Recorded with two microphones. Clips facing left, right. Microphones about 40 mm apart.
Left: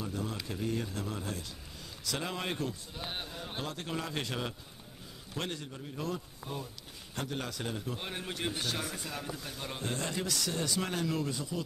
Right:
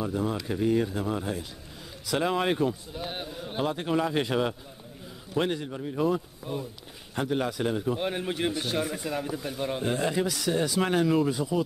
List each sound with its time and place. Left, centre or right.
0.0 s a man's voice: centre
2.9 s a man's voice: centre
3.6 s a man's voice: centre